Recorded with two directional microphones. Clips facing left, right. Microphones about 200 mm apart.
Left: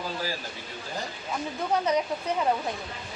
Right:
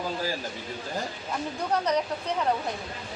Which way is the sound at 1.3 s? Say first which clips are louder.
Left 1 dB; 5° left (ahead or behind).